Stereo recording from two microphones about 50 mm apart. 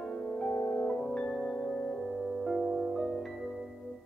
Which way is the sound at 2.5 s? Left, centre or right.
Centre.